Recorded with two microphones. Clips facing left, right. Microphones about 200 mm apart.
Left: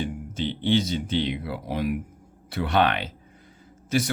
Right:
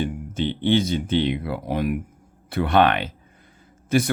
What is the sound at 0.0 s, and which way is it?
Speech, 55° right (ahead or behind).